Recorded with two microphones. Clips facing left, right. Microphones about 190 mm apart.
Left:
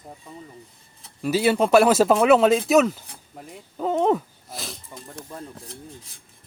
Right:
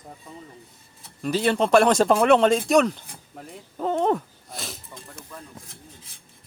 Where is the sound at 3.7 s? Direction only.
Centre (ahead or behind).